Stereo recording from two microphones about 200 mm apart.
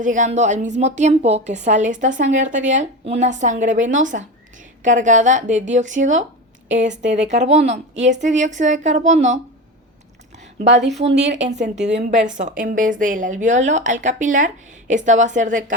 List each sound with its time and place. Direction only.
0.0 s a woman's voice: 40° right (ahead or behind)
10.3 s a sound: 35° right (ahead or behind)
10.7 s a woman's voice: 60° right (ahead or behind)
11.2 s a woman's voice: 35° right (ahead or behind)